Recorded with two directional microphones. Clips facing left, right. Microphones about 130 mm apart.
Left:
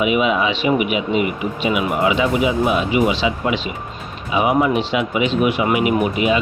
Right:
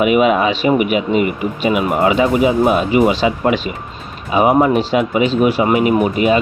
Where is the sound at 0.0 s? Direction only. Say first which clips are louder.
Right 5 dB; 50° right (ahead or behind).